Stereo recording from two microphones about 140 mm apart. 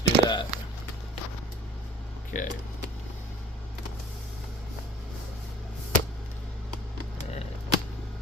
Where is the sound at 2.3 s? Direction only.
70° left (ahead or behind).